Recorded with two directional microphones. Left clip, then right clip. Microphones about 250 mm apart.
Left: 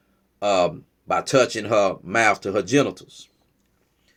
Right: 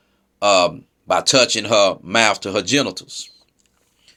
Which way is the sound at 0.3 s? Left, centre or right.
Centre.